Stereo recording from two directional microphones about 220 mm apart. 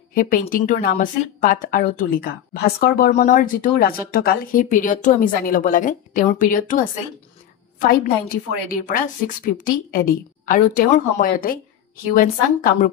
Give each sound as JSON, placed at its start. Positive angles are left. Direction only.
{"t": 0.1, "sound": "speech", "side_deg": 40}